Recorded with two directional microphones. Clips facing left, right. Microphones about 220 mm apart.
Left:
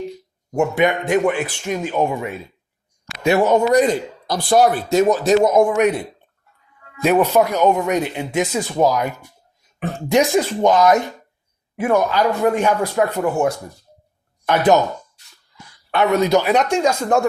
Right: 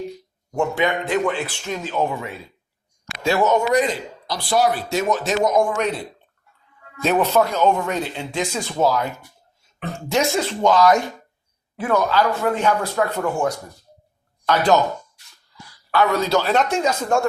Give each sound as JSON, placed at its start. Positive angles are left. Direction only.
{"t": 0.5, "sound": "speech", "side_deg": 20}
{"t": 3.4, "sound": "speech", "side_deg": 35}
{"t": 5.7, "sound": "speech", "side_deg": 15}
{"t": 7.0, "sound": "speech", "side_deg": 10}
{"t": 15.9, "sound": "speech", "side_deg": 25}